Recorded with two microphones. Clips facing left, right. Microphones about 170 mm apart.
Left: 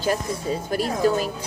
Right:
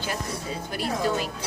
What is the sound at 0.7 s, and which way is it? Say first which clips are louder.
Speech: left 5 dB; 40° left (ahead or behind).